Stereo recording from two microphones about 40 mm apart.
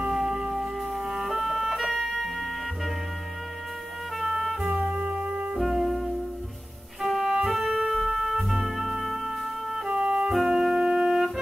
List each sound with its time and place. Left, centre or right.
0.0 s music: centre
4.2 s music: centre
4.7 s music: right
5.7 s music: centre
10.0 s music: centre
10.3 s music: centre